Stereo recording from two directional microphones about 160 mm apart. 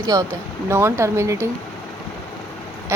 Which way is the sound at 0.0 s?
25° right (ahead or behind).